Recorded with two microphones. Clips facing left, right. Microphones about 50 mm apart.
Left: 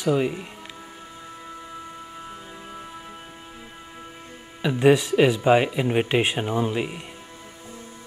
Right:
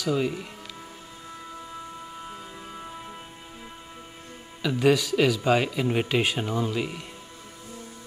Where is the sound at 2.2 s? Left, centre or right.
Centre.